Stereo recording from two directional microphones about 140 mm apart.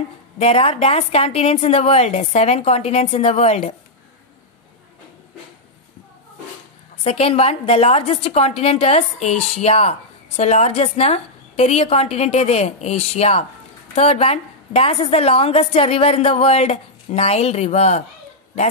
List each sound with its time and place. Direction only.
0.4 s a woman's voice: 45° left (ahead or behind)
7.0 s a woman's voice: 45° left (ahead or behind)